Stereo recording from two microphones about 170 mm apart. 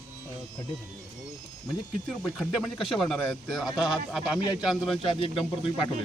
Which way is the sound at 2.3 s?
Centre (ahead or behind).